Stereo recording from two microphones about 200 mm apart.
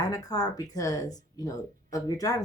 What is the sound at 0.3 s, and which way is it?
Speech, 20° left (ahead or behind).